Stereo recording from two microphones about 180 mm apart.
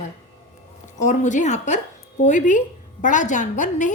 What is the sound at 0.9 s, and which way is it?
A woman's voice, 40° left (ahead or behind).